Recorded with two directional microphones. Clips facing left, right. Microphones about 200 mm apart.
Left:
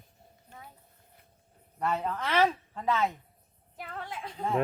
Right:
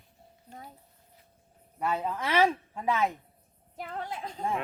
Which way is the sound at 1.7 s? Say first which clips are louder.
Even; 10° right (ahead or behind).